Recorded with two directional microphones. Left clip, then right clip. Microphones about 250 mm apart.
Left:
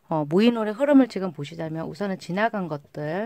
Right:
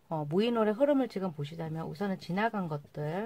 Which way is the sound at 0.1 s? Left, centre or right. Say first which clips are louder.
Left 8 dB; left.